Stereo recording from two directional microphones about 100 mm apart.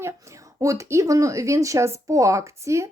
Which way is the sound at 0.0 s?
30° right (ahead or behind).